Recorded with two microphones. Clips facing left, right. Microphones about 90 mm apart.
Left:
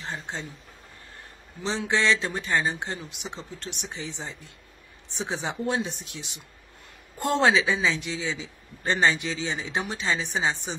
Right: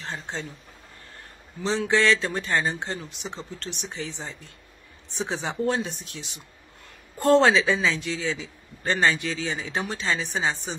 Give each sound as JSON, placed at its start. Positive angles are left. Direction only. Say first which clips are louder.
{"t": 0.0, "sound": "speech", "louder": "right 1 dB", "side_deg": 10}
{"t": 1.6, "sound": "a man's voice", "louder": "right 3 dB", "side_deg": 20}